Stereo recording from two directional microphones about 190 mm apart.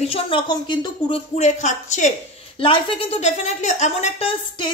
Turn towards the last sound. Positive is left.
turn(degrees=30)  # may be behind; listen again after turning